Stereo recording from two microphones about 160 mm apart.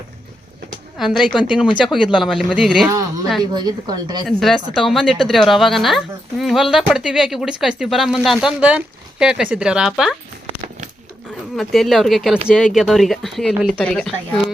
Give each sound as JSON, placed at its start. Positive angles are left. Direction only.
{"t": 0.9, "sound": "speech", "side_deg": 0}
{"t": 3.5, "sound": "a woman's voice", "side_deg": -25}
{"t": 4.3, "sound": "speech", "side_deg": 0}
{"t": 11.5, "sound": "speech", "side_deg": 0}